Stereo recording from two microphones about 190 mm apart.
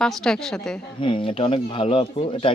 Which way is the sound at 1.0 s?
25° left (ahead or behind).